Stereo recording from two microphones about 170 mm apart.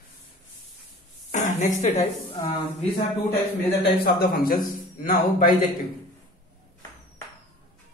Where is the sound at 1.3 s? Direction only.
45° left (ahead or behind).